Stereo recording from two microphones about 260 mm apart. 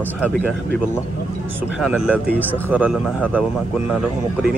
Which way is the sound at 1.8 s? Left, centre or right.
Centre.